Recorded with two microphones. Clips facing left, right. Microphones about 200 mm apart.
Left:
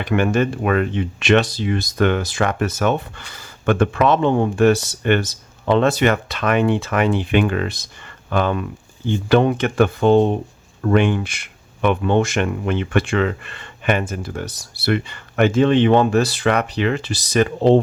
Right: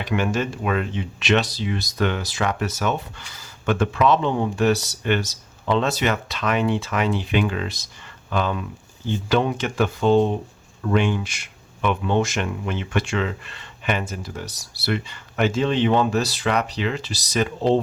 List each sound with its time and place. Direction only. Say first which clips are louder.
0.0 s speech: left 5 dB; 55° left (ahead or behind)